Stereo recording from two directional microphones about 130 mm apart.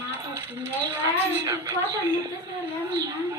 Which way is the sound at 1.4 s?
25° right (ahead or behind).